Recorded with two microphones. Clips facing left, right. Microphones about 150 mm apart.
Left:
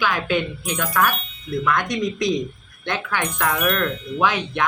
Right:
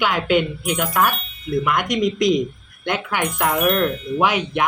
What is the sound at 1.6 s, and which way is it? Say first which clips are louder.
Speech: right 1 dB; 15° right (ahead or behind).